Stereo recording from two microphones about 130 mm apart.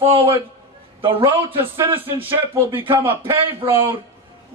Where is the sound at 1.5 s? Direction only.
15° right (ahead or behind).